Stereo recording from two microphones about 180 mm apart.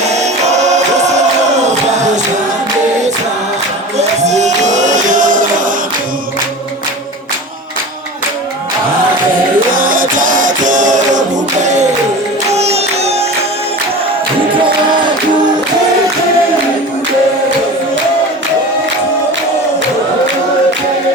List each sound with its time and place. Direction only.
0.0 s music: 40° right (ahead or behind)
3.9 s music: 40° right (ahead or behind)
9.7 s music: 50° right (ahead or behind)